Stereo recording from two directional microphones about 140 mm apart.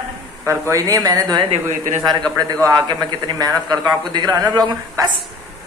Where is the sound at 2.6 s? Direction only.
30° right (ahead or behind).